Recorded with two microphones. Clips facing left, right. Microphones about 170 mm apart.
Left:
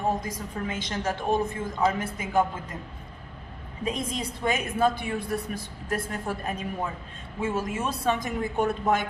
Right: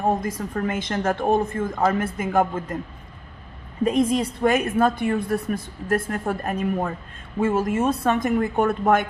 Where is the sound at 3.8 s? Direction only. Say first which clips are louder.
Right 10 dB; 55° right (ahead or behind).